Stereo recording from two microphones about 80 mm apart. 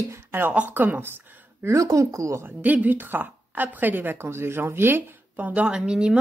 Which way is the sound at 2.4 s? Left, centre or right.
Right.